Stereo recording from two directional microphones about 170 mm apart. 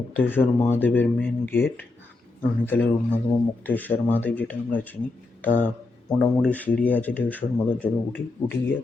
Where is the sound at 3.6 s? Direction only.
10° left (ahead or behind).